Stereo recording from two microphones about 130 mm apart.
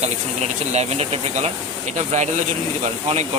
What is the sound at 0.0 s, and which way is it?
Speech, 55° right (ahead or behind).